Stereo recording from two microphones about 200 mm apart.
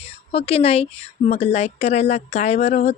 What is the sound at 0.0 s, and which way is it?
Speech, 30° left (ahead or behind).